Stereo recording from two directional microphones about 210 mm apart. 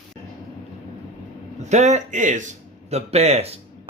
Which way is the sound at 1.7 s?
35° right (ahead or behind).